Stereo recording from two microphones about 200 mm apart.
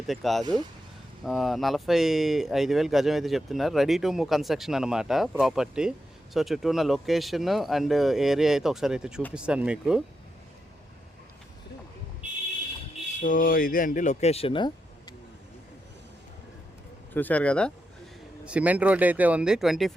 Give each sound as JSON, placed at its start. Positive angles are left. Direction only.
{"t": 0.1, "sound": "speech", "side_deg": 0}
{"t": 13.1, "sound": "speech", "side_deg": 40}
{"t": 17.2, "sound": "speech", "side_deg": 5}
{"t": 18.4, "sound": "speech", "side_deg": -5}